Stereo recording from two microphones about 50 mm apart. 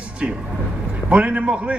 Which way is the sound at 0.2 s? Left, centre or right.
Right.